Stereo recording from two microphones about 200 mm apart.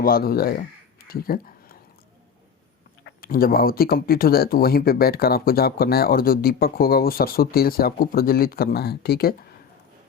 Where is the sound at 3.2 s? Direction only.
45° left (ahead or behind).